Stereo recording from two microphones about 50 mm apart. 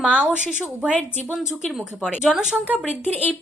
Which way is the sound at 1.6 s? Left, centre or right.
Centre.